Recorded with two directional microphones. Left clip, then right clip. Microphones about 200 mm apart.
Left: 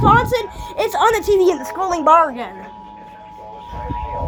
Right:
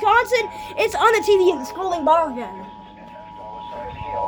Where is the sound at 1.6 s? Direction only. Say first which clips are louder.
Left 4 dB; 15° left (ahead or behind).